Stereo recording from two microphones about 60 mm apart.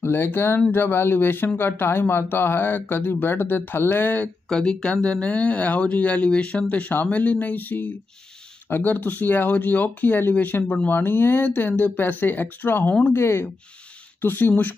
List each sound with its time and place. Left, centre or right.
0.0 s speech: left
4.5 s speech: centre
5.0 s speech: left
14.2 s speech: left